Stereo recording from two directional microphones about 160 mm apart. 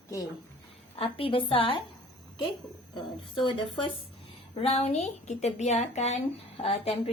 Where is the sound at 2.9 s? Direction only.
30° left (ahead or behind).